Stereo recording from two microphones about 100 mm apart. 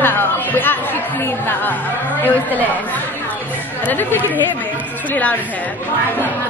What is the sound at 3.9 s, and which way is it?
Speech, 20° left (ahead or behind).